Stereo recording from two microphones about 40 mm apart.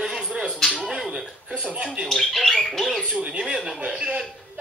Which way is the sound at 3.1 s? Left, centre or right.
Right.